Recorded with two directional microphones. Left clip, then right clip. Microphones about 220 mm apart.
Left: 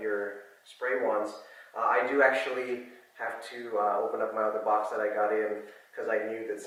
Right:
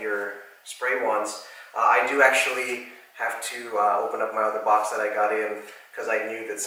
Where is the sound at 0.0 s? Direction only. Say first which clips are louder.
Right 4 dB; 15° left (ahead or behind).